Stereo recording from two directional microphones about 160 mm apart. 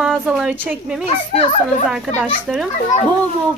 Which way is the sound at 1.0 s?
40° left (ahead or behind).